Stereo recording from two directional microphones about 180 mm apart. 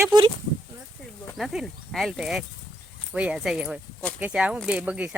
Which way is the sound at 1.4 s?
Centre (ahead or behind).